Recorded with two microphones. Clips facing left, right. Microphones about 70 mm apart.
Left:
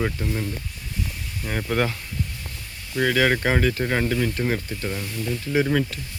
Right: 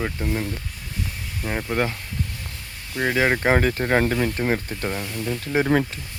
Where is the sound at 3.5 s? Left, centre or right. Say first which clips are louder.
Right 2 dB; right.